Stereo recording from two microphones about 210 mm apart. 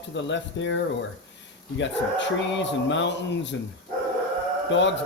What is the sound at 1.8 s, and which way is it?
Speech, 60° left (ahead or behind).